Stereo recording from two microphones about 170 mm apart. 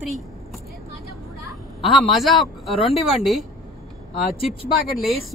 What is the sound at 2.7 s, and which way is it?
Speech, 30° left (ahead or behind).